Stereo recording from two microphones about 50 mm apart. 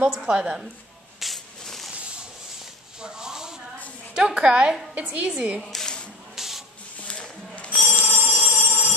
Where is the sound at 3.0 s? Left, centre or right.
Centre.